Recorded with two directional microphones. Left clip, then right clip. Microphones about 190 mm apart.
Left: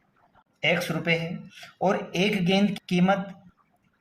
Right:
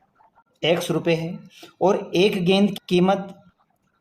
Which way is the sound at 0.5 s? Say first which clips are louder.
Right 4 dB; 35° right (ahead or behind).